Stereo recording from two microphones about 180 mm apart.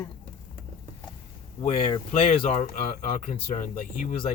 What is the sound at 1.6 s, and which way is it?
Speech, 30° left (ahead or behind).